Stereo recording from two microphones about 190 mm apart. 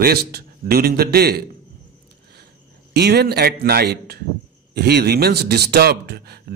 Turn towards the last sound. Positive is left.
turn(degrees=-55)  # may be behind; listen again after turning